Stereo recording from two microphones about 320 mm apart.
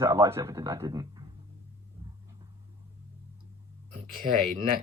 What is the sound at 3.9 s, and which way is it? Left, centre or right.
Speech, right.